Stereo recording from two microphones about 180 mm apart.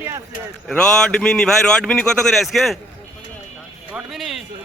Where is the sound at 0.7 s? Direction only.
5° left (ahead or behind).